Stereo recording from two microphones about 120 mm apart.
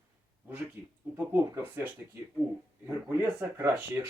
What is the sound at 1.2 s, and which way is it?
Speech, 20° right (ahead or behind).